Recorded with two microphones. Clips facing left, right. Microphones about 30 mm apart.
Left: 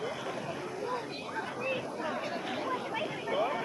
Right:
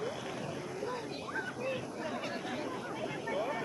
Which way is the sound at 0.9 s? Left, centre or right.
Left.